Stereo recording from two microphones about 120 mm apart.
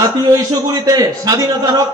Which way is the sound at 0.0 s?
30° right (ahead or behind).